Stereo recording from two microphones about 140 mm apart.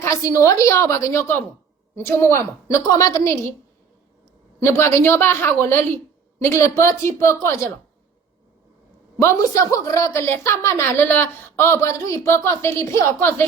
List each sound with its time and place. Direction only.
0.0 s a woman's voice: 25° left (ahead or behind)
4.6 s a woman's voice: 20° left (ahead or behind)
9.2 s a woman's voice: 25° left (ahead or behind)